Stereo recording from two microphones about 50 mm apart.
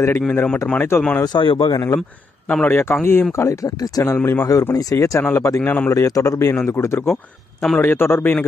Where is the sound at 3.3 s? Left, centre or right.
Left.